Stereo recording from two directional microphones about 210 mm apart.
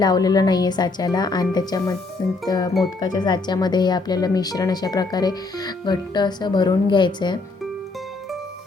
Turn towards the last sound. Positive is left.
turn(degrees=20)  # may be behind; listen again after turning